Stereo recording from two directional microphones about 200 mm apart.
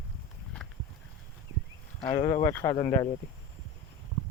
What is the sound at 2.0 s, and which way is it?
Speech, 20° left (ahead or behind).